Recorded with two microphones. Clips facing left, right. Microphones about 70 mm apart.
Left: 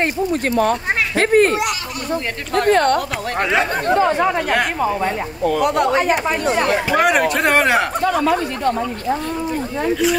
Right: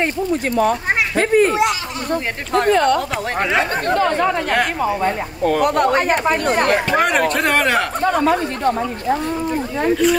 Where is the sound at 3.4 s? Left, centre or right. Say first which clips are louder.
Left 1 dB; centre.